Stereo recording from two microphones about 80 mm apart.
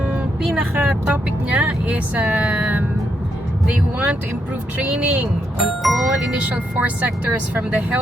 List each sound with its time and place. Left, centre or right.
0.4 s speech: centre
3.9 s speech: centre
5.5 s music: centre
6.4 s speech: centre